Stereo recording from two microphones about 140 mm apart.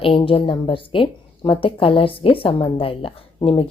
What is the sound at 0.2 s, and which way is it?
A woman's voice, 40° left (ahead or behind).